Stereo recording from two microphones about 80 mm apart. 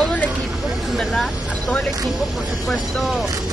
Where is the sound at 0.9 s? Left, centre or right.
Centre.